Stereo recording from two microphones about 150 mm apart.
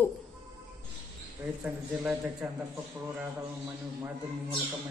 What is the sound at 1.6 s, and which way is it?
Speech, 10° right (ahead or behind).